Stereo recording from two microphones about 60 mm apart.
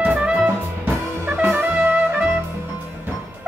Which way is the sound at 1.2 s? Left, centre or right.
Right.